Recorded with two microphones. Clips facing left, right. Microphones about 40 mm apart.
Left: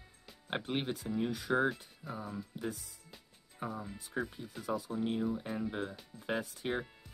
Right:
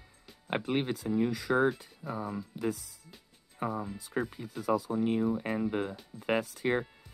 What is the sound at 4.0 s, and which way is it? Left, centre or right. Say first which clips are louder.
Speech: right 4 dB; right.